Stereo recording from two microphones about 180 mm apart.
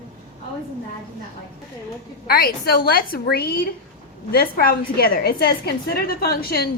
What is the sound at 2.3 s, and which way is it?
A woman's voice, 55° left (ahead or behind).